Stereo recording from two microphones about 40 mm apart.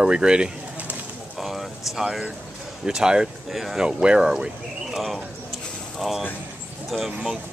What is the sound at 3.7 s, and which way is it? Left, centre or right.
Speech, right.